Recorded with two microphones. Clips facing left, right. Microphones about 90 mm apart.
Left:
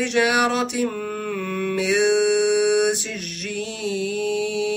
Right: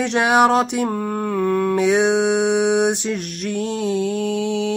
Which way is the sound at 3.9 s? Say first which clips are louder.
Even; 40° right (ahead or behind).